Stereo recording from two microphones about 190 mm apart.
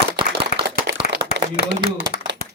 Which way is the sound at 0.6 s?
60° right (ahead or behind).